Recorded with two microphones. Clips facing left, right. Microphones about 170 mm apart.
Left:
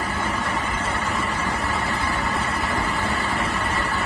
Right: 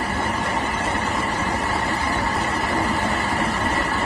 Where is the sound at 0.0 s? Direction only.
35° right (ahead or behind).